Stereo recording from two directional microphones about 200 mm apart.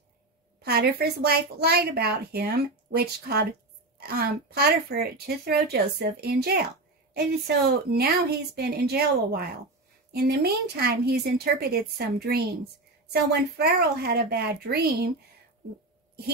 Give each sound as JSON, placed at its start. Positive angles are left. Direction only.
{"t": 0.6, "sound": "a woman's voice", "side_deg": -50}
{"t": 7.9, "sound": "a woman's voice", "side_deg": -55}